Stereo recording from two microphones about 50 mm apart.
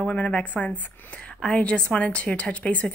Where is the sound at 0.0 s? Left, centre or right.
Left.